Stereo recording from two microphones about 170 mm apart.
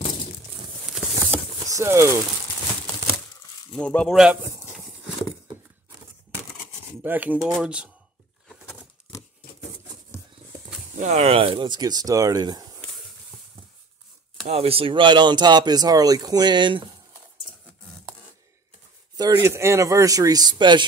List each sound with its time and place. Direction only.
0.8 s patter: centre (ahead or behind)
1.3 s a sound: 15° right (ahead or behind)
3.7 s speech: 5° left (ahead or behind)
4.4 s speech: 20° right (ahead or behind)
7.0 s speech: 10° right (ahead or behind)
11.0 s speech: 40° right (ahead or behind); by 12.8 s 25° right (ahead or behind)
14.4 s speech: 35° right (ahead or behind)
19.1 s speech: 20° right (ahead or behind)